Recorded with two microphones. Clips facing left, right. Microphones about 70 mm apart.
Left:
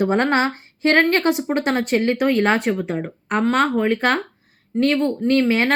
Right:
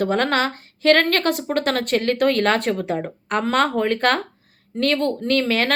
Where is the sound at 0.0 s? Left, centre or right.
Centre.